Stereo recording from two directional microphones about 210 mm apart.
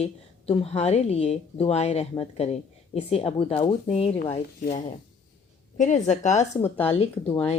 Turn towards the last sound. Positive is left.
turn(degrees=30)  # may be behind; listen again after turning